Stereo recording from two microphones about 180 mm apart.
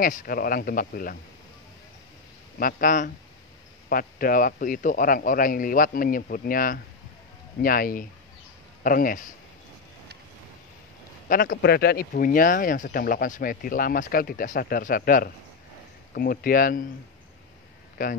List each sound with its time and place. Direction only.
0.0 s speech: 50° left (ahead or behind)
2.6 s speech: 45° left (ahead or behind)
11.2 s speech: 50° left (ahead or behind)
18.0 s speech: 50° left (ahead or behind)